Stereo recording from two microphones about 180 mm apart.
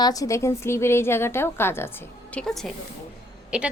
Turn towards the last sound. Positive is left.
turn(degrees=-5)  # may be behind; listen again after turning